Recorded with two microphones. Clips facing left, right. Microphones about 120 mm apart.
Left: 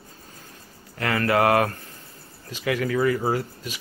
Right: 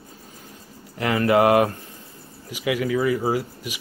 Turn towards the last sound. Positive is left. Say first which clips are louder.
# right 1 dB
turn(degrees=-10)  # may be behind; listen again after turning